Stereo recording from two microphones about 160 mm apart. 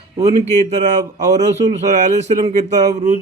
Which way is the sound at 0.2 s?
40° right (ahead or behind).